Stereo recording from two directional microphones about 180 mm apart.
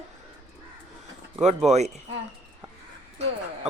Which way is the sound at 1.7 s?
35° right (ahead or behind).